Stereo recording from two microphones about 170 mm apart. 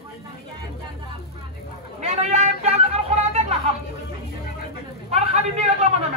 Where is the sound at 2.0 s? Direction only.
40° right (ahead or behind).